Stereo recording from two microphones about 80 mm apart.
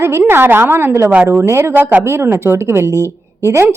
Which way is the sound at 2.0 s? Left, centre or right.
Right.